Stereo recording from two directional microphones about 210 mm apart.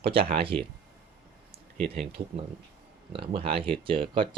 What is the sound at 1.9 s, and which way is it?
Speech, 25° right (ahead or behind).